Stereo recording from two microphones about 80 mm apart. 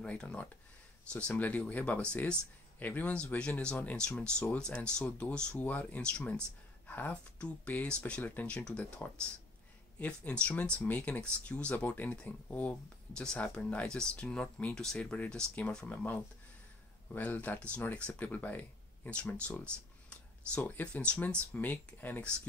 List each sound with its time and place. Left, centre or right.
0.0 s speech: centre